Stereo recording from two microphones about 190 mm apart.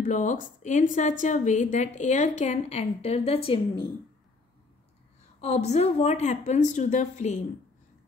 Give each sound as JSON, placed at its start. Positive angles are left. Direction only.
{"t": 0.0, "sound": "a woman's voice", "side_deg": 40}
{"t": 5.4, "sound": "a woman's voice", "side_deg": 35}